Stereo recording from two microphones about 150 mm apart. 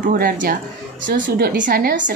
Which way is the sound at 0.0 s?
65° right (ahead or behind).